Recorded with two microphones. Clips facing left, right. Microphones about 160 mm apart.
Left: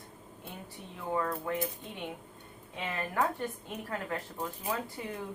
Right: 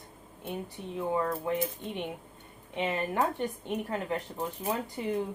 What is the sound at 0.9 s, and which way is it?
Speech, 25° right (ahead or behind).